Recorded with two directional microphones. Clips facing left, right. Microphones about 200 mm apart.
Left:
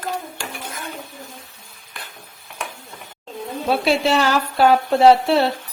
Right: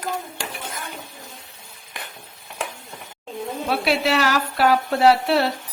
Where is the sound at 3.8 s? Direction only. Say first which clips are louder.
Left 2 dB; 25° left (ahead or behind).